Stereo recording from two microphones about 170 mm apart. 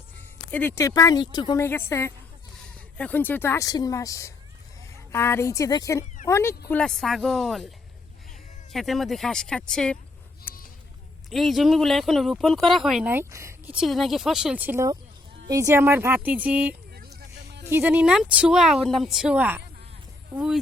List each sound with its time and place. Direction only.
0.5 s speech: 15° left (ahead or behind)
1.6 s speech: 15° left (ahead or behind)
6.7 s speech: 5° left (ahead or behind)
8.7 s speech: centre (ahead or behind)
10.5 s a sound: 10° left (ahead or behind)
11.3 s speech: centre (ahead or behind)
13.1 s speech: 15° right (ahead or behind)
16.9 s vehicle: 75° right (ahead or behind)
17.7 s speech: 10° right (ahead or behind)